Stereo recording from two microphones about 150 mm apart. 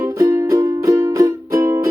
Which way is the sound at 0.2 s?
20° right (ahead or behind).